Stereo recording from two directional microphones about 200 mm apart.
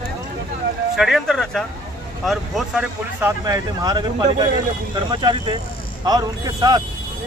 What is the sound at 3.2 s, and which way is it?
Speech, 15° right (ahead or behind).